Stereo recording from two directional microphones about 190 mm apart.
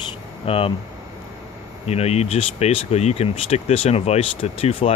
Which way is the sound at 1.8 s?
35° left (ahead or behind).